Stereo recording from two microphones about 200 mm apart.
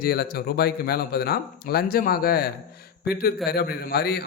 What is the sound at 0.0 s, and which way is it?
Speech, 50° left (ahead or behind).